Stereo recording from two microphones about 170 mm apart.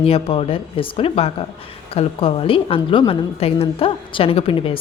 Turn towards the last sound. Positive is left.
turn(degrees=30)  # may be behind; listen again after turning